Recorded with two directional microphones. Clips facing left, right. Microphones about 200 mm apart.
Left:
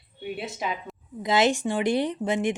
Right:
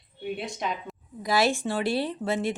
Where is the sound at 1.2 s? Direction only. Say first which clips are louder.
Left 2 dB; 20° left (ahead or behind).